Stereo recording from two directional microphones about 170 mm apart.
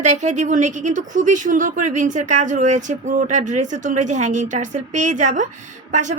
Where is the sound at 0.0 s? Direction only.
45° right (ahead or behind).